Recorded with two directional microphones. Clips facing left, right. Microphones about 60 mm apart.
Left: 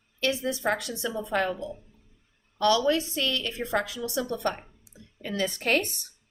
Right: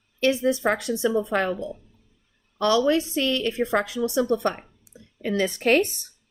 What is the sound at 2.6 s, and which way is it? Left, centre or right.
A woman's voice, right.